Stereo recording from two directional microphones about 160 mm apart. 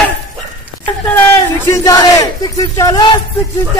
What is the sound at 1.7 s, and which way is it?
Battle cry, 20° left (ahead or behind).